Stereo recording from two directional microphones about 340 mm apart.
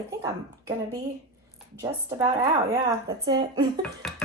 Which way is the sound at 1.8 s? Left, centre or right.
Centre.